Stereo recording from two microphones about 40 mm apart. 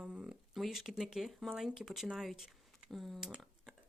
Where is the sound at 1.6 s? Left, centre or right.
Centre.